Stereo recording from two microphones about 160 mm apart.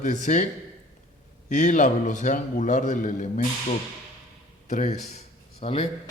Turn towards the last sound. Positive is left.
turn(degrees=40)  # may be behind; listen again after turning